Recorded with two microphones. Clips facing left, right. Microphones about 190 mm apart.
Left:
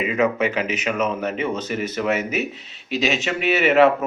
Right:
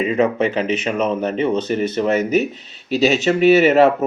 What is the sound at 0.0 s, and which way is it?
Speech, 30° right (ahead or behind).